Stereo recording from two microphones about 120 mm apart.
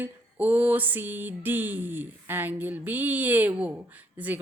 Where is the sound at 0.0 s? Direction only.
15° right (ahead or behind).